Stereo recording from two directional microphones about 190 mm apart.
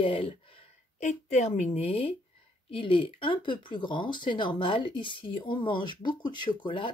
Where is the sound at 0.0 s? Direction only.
30° left (ahead or behind).